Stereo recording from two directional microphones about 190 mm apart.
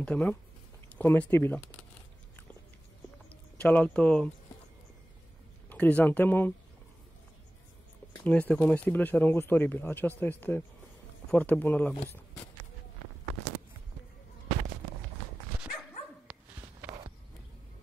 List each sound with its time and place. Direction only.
0.0 s speech: 5° left (ahead or behind)
3.5 s speech: 10° left (ahead or behind)
5.7 s speech: 10° left (ahead or behind)
8.2 s speech: 5° left (ahead or behind)
16.3 s dog: 5° right (ahead or behind)
16.8 s horse: 20° right (ahead or behind)